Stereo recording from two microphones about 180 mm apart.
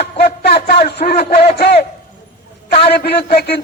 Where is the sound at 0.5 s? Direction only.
60° left (ahead or behind).